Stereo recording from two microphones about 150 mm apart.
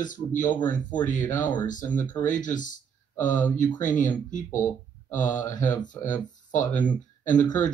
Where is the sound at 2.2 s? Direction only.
60° left (ahead or behind).